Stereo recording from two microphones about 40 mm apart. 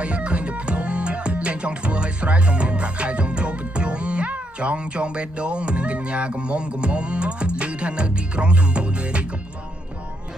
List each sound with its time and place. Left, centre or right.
0.0 s music: right